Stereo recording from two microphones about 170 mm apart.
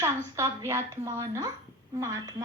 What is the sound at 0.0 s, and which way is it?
A woman's voice, 15° right (ahead or behind).